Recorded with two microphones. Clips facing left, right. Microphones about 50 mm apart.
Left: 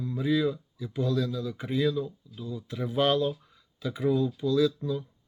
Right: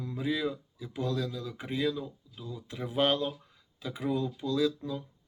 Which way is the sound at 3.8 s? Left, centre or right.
Centre.